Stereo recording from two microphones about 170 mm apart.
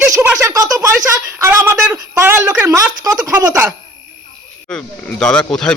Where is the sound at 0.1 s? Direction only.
15° right (ahead or behind).